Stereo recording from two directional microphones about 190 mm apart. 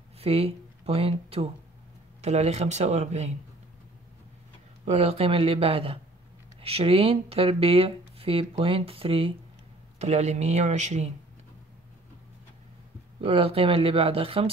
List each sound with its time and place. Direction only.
0.2 s speech: 30° right (ahead or behind)
4.8 s speech: 35° right (ahead or behind)
13.2 s speech: 30° right (ahead or behind)